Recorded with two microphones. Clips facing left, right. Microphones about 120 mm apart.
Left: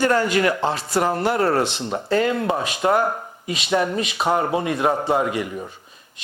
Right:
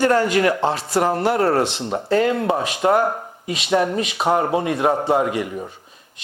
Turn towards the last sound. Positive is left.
turn(degrees=-45)  # may be behind; listen again after turning